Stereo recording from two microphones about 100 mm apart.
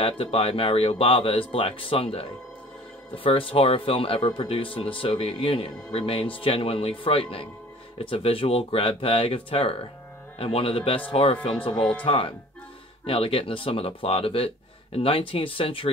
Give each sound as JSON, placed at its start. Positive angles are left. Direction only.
{"t": 0.0, "sound": "speech", "side_deg": 70}
{"t": 3.3, "sound": "speech", "side_deg": 60}